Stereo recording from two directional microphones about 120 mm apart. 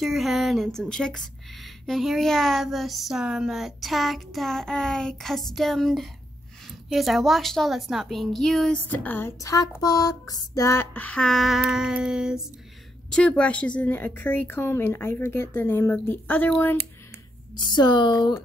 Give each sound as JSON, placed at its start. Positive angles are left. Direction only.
{"t": 0.0, "sound": "speech", "side_deg": 0}
{"t": 8.8, "sound": "a woman's voice", "side_deg": 15}
{"t": 9.4, "sound": "a woman's voice", "side_deg": 30}
{"t": 13.1, "sound": "a woman's voice", "side_deg": 10}
{"t": 17.6, "sound": "a woman's voice", "side_deg": 40}